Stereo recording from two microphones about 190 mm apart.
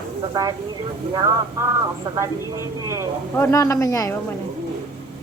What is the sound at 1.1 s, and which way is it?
Speech, 15° right (ahead or behind).